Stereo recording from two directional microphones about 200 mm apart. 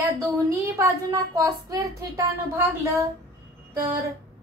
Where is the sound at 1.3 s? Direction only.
15° right (ahead or behind).